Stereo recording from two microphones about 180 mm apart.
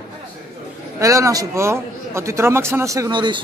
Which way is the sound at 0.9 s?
15° right (ahead or behind).